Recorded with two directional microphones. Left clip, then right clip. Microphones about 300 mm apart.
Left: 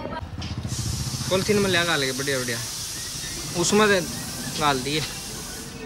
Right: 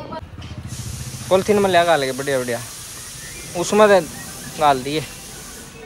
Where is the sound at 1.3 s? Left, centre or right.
Centre.